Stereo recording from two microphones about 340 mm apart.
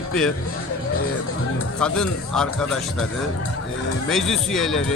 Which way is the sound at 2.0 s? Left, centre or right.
Centre.